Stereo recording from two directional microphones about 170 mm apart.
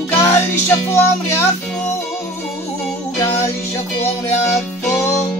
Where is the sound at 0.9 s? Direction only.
15° left (ahead or behind).